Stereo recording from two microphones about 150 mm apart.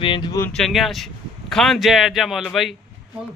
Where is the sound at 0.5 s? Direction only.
Centre (ahead or behind).